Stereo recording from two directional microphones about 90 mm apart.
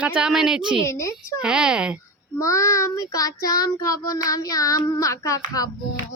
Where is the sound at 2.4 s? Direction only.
35° left (ahead or behind).